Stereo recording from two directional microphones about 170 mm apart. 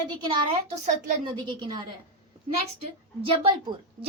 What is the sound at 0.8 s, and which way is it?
Speech, 45° right (ahead or behind).